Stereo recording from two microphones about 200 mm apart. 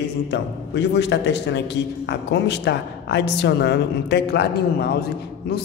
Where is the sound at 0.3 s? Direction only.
60° left (ahead or behind).